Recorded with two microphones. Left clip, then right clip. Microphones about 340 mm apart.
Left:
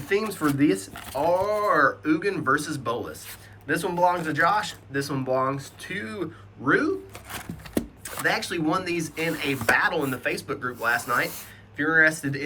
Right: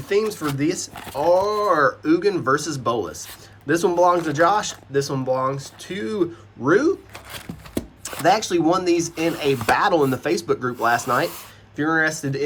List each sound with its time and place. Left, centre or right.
0.1 s speech: centre